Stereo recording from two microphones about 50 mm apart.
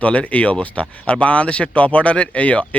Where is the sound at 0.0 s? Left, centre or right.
Left.